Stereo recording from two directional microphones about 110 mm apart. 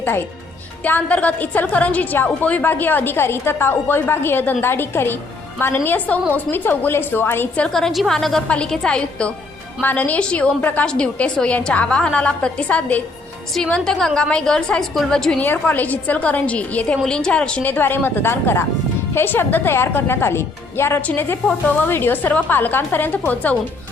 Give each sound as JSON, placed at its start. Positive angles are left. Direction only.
{"t": 0.9, "sound": "a woman's voice", "side_deg": 15}